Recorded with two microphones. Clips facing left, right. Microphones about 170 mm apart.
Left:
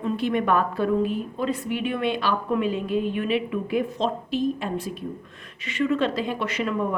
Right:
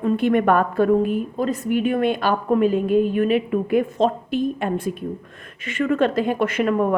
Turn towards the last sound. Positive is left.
turn(degrees=-55)  # may be behind; listen again after turning